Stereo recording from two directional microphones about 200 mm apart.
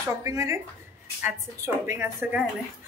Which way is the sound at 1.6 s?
10° right (ahead or behind).